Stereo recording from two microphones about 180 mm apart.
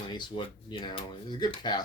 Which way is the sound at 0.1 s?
25° left (ahead or behind).